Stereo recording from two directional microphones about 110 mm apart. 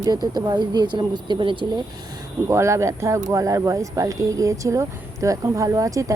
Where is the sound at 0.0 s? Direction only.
35° right (ahead or behind).